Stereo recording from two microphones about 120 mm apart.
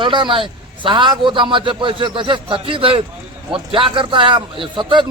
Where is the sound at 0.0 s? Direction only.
40° right (ahead or behind).